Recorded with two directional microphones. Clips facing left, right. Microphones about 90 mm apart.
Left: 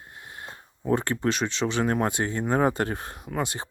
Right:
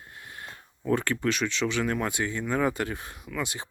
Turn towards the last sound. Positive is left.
turn(degrees=40)  # may be behind; listen again after turning